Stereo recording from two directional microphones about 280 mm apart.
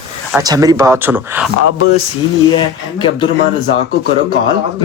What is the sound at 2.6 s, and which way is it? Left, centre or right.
Speech, centre.